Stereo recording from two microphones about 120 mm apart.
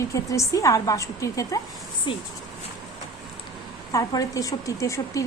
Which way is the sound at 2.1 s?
40° left (ahead or behind).